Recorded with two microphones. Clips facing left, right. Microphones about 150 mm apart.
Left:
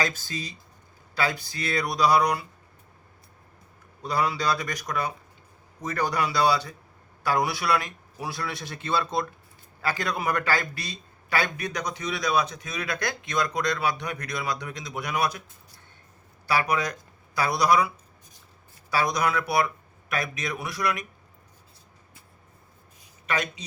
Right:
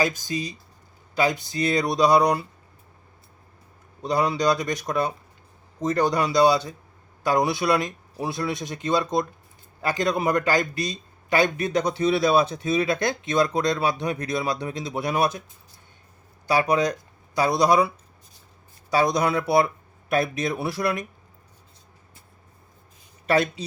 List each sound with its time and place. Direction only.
0.0 s a man's voice: 15° right (ahead or behind)
4.0 s a man's voice: 20° right (ahead or behind)
16.5 s a man's voice: 20° right (ahead or behind)
23.2 s speech: 35° right (ahead or behind)